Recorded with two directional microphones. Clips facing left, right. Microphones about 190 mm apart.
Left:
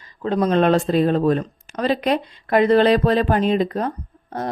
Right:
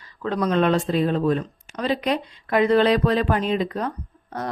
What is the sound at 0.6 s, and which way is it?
Speech, 40° left (ahead or behind).